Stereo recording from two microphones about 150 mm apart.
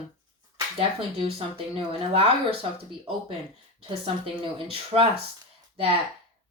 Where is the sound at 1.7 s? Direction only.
40° right (ahead or behind).